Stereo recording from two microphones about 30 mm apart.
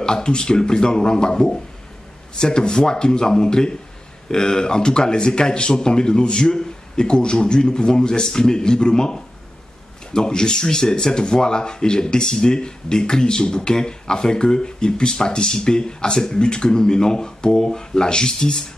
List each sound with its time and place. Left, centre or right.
0.0 s speech: left